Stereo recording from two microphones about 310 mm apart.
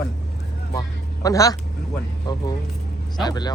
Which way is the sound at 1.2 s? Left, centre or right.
Centre.